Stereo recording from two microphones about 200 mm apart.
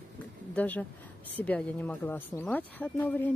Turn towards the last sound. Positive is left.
turn(degrees=10)  # may be behind; listen again after turning